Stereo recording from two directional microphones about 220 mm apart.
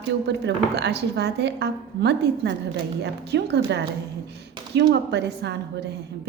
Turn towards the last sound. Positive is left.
turn(degrees=-50)  # may be behind; listen again after turning